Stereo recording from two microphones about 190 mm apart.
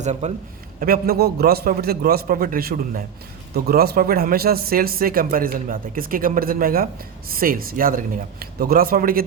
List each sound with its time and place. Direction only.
0.0 s a man's voice: 35° right (ahead or behind)
0.8 s speech: 55° right (ahead or behind)